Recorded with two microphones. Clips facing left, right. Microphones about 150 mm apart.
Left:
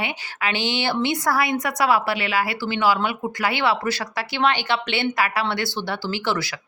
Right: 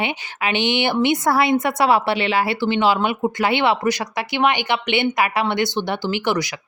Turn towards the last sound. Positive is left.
turn(degrees=-15)  # may be behind; listen again after turning